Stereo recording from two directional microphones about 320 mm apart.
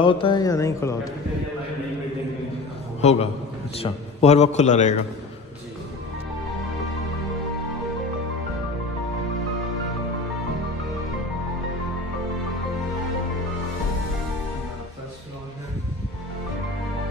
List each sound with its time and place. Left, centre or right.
0.0 s speech: centre
3.0 s a man's voice: centre